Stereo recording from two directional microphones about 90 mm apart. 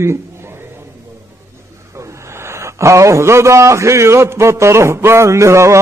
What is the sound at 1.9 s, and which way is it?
A man's voice, 35° right (ahead or behind).